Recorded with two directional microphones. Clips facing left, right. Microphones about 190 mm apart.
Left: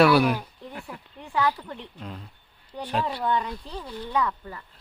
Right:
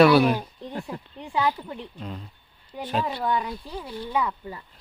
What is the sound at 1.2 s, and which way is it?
Speech, 15° right (ahead or behind).